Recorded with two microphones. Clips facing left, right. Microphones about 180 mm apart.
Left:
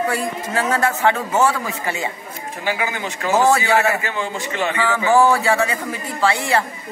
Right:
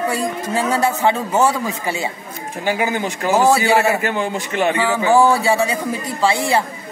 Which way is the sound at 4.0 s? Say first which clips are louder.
Right 4 dB; 55° right (ahead or behind).